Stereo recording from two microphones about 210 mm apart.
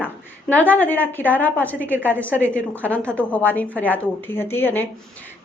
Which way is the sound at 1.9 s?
10° right (ahead or behind).